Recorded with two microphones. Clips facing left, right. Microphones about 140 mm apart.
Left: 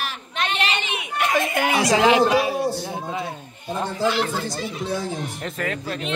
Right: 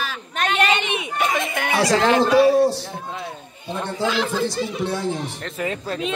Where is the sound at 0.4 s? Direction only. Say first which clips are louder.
Right 5 dB; 50° right (ahead or behind).